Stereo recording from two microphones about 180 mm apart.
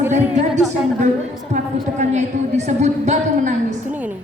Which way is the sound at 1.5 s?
40° right (ahead or behind).